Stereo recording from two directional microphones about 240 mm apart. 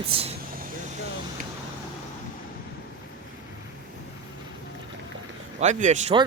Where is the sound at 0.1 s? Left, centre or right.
Right.